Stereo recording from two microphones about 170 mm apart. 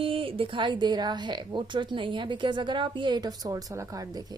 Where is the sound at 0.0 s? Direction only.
30° right (ahead or behind).